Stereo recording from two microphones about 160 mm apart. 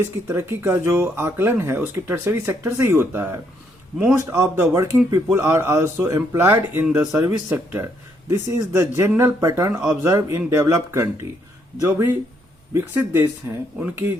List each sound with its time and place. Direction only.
0.3 s speech: 15° right (ahead or behind)
9.7 s speech: centre (ahead or behind)
10.0 s speech: 20° right (ahead or behind)